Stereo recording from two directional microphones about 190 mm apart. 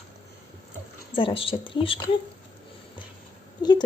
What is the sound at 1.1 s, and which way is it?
Speech, 30° left (ahead or behind).